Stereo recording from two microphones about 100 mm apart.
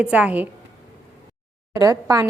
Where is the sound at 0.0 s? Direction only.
15° right (ahead or behind).